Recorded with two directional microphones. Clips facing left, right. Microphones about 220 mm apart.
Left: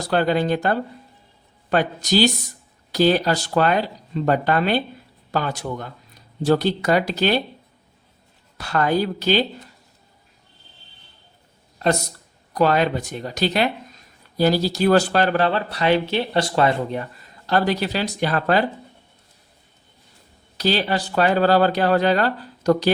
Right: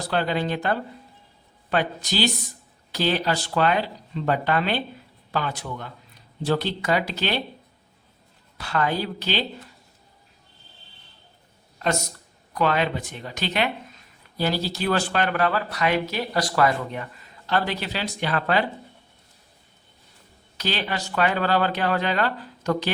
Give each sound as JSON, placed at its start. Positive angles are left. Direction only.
{"t": 0.1, "sound": "speech", "side_deg": 45}
{"t": 8.5, "sound": "speech", "side_deg": 45}
{"t": 11.8, "sound": "speech", "side_deg": 35}
{"t": 20.6, "sound": "speech", "side_deg": 35}